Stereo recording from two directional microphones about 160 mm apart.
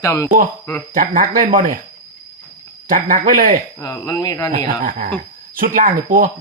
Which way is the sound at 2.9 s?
60° right (ahead or behind).